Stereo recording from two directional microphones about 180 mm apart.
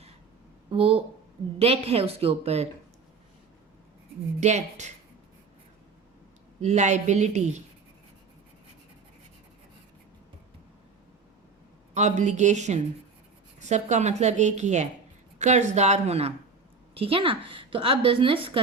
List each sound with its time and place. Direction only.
0.7 s a woman's voice: 30° right (ahead or behind)
4.4 s a woman's voice: 40° right (ahead or behind)
6.6 s a woman's voice: 40° right (ahead or behind)
11.9 s a woman's voice: 40° right (ahead or behind)